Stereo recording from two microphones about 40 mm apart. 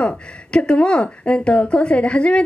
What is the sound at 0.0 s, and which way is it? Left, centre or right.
Speech, left.